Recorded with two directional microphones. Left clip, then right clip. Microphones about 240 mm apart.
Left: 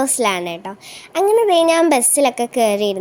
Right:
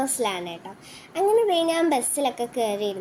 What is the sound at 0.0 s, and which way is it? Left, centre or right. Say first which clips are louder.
A child's voice: left 8 dB; left.